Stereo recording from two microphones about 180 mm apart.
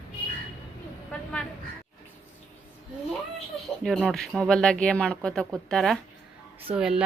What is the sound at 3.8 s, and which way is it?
A woman's voice, centre (ahead or behind).